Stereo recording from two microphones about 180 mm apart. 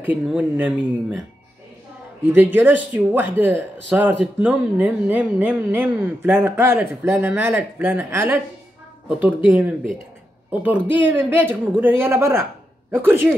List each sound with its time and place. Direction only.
0.0 s speech: 10° right (ahead or behind)
2.2 s speech: 10° right (ahead or behind)